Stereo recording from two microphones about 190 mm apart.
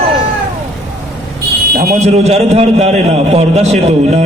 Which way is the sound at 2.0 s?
35° right (ahead or behind).